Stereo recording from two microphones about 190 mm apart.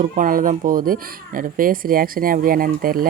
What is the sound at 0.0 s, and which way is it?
Speech, 45° right (ahead or behind).